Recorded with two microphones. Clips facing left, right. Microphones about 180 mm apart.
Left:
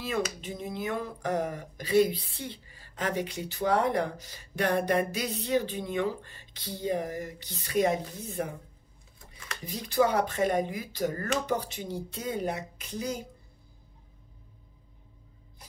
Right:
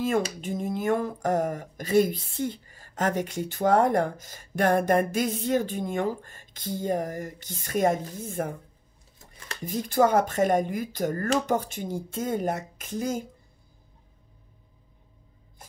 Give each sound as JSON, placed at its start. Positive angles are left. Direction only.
{"t": 0.4, "sound": "speech", "side_deg": -50}
{"t": 9.7, "sound": "speech", "side_deg": -50}